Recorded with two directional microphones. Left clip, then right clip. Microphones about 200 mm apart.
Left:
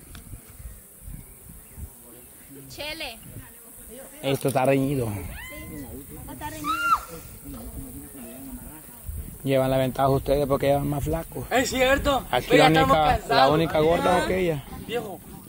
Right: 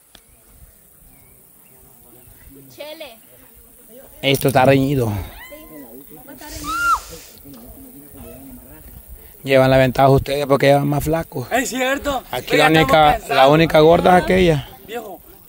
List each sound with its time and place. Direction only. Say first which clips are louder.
2.7 s speech: even; 45° left (ahead or behind)
4.2 s speech: right 9 dB; 55° right (ahead or behind); by 5.7 s 35° right (ahead or behind)
6.6 s snake: right 5 dB; 25° right (ahead or behind)
9.4 s speech: right 9 dB; 55° right (ahead or behind); by 15.1 s 40° right (ahead or behind)